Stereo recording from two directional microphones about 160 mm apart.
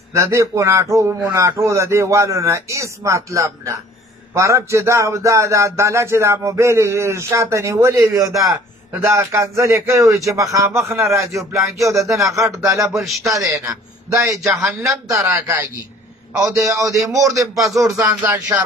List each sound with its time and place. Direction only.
0.1 s a man's voice: 20° right (ahead or behind)
4.3 s a sound: 20° right (ahead or behind)
11.5 s a man's voice: 20° right (ahead or behind)
12.9 s a man's voice: centre (ahead or behind)
14.1 s a man's voice: 20° right (ahead or behind)
14.5 s a man's voice: centre (ahead or behind)
14.8 s a sound: 15° right (ahead or behind)
16.3 s a man's voice: 20° right (ahead or behind)